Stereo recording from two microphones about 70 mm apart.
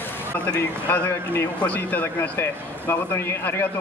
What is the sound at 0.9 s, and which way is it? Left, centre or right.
Speech, left.